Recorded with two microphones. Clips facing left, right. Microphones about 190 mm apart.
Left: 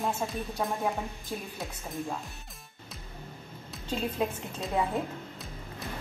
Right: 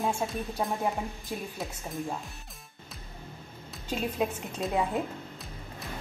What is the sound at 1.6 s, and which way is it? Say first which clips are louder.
Speech: right 2 dB; centre (ahead or behind).